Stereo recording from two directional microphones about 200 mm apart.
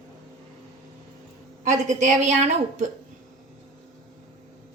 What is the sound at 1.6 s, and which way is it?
A woman's voice, 40° right (ahead or behind).